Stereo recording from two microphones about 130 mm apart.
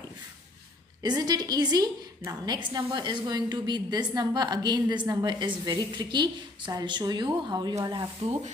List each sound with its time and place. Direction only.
1.0 s a woman's voice: 30° right (ahead or behind)